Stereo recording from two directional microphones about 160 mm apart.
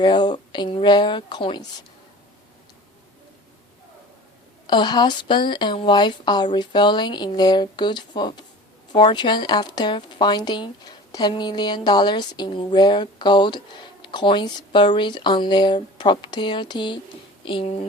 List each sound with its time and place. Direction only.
0.0 s speech: 30° left (ahead or behind)
4.6 s speech: 30° left (ahead or behind)